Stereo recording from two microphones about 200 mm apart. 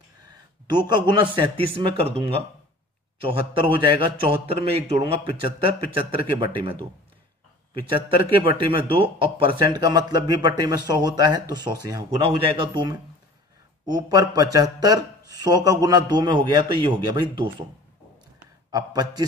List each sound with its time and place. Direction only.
0.7 s a man's voice: 20° right (ahead or behind)
7.7 s a man's voice: 25° right (ahead or behind)
18.7 s a man's voice: 20° right (ahead or behind)